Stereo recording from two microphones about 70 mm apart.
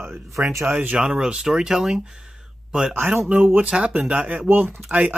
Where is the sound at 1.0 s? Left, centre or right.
Centre.